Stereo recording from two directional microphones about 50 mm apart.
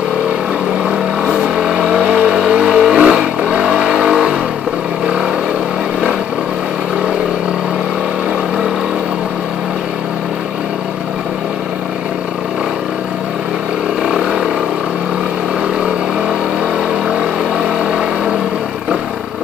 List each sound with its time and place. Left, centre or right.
0.8 s vehicle: centre
14.2 s vehicle: centre
17.1 s vehicle: centre